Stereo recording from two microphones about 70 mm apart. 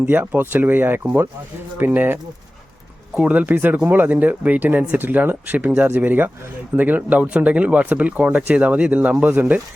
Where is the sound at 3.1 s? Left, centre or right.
Centre.